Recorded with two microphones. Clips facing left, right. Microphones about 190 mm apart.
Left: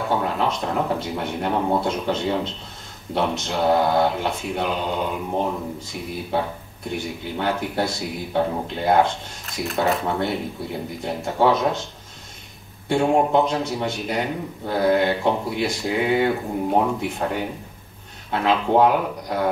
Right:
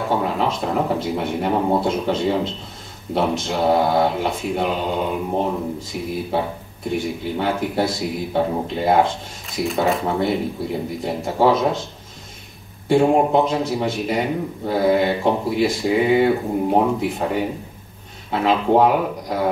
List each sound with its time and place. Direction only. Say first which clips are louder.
0.1 s speech: right 2 dB; centre (ahead or behind)
12.8 s speech: right 3 dB; 5° right (ahead or behind)